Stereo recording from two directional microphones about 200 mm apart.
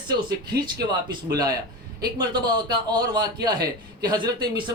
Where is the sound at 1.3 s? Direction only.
20° right (ahead or behind).